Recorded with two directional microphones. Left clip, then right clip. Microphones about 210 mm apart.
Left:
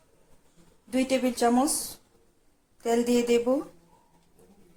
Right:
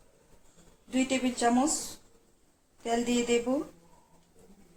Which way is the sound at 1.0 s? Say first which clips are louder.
Left 4 dB; 30° left (ahead or behind).